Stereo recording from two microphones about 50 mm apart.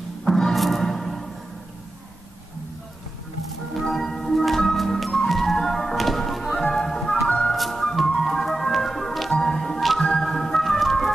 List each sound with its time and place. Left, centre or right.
0.2 s music: centre
3.7 s music: centre